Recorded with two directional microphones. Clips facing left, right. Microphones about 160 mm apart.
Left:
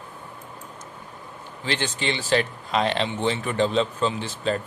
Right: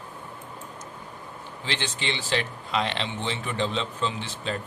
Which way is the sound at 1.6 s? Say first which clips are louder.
Left 4 dB; 45° left (ahead or behind).